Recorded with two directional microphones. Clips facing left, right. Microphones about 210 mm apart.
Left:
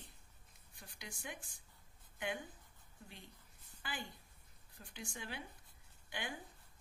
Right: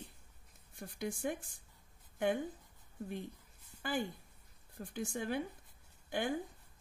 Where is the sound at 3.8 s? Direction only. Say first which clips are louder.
Right 11 dB; 50° right (ahead or behind).